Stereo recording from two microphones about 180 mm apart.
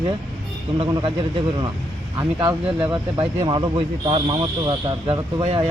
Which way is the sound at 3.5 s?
30° right (ahead or behind).